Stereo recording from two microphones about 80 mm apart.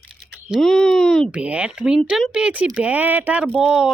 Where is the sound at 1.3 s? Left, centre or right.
Centre.